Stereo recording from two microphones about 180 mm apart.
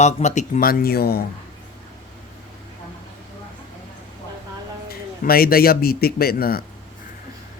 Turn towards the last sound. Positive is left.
turn(degrees=55)  # may be behind; listen again after turning